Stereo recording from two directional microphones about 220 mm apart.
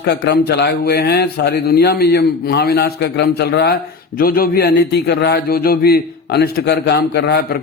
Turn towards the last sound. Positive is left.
turn(degrees=50)  # may be behind; listen again after turning